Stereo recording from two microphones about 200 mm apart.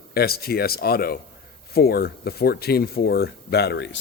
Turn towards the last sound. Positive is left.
turn(degrees=55)  # may be behind; listen again after turning